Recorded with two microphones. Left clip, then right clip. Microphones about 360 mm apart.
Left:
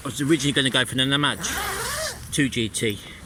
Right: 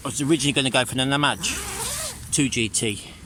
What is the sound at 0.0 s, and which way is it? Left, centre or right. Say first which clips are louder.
Speech: even; centre.